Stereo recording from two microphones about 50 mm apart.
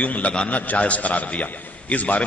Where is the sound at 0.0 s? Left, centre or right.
Left.